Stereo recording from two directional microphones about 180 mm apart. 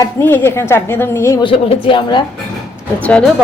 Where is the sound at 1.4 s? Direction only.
30° left (ahead or behind).